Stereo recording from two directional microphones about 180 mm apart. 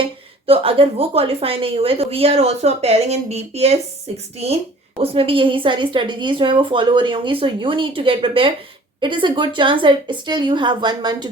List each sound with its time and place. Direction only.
0.0 s a woman's voice: 30° right (ahead or behind)
4.9 s a woman's voice: 30° right (ahead or behind)